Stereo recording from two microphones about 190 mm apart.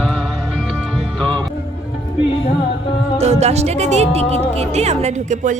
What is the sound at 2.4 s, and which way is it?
Music, 25° left (ahead or behind).